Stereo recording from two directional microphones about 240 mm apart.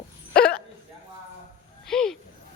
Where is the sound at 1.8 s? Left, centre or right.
Centre.